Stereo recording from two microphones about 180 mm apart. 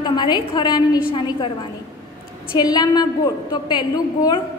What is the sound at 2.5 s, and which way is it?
A woman's voice, 20° left (ahead or behind).